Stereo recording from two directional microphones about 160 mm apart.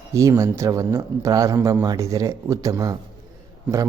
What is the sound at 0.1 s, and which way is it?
A man's voice, 20° right (ahead or behind).